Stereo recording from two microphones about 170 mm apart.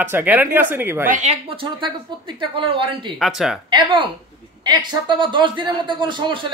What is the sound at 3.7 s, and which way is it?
Speech, 30° right (ahead or behind).